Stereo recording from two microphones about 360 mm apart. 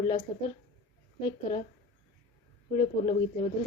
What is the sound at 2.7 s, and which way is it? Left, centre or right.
Speech, centre.